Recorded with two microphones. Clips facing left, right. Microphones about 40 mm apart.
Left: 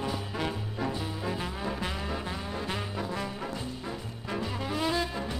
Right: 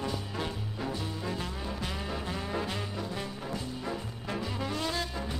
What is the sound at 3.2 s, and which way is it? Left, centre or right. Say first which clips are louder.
Music: left 2 dB; centre.